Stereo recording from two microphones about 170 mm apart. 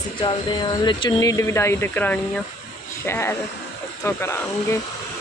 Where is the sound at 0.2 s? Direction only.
25° left (ahead or behind).